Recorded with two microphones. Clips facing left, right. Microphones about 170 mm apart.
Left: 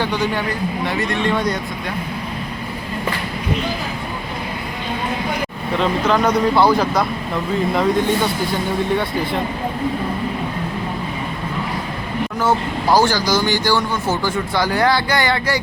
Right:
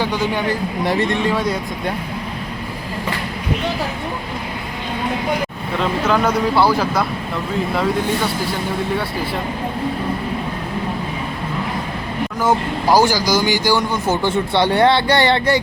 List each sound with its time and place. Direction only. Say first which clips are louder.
0.0 s speech: even; 10° right (ahead or behind)
0.9 s speech: right 7 dB; 30° right (ahead or behind)
1.2 s speech: even; 5° right (ahead or behind)
6.1 s speech: left 1 dB; 5° right (ahead or behind)
12.4 s speech: right 1 dB; 10° right (ahead or behind)
14.3 s speech: right 3 dB; 25° right (ahead or behind)